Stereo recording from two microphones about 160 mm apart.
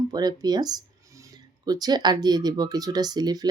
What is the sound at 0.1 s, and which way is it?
Speech, 25° right (ahead or behind).